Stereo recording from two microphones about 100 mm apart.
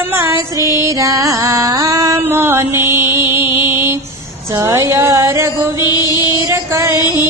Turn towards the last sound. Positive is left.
turn(degrees=-30)  # may be behind; listen again after turning